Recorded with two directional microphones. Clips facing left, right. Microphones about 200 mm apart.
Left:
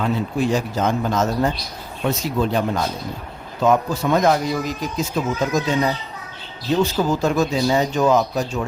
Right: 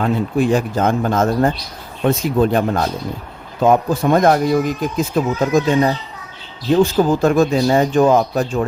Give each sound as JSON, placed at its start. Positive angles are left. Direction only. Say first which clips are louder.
{"t": 0.0, "sound": "speech", "louder": "right 4 dB", "side_deg": -55}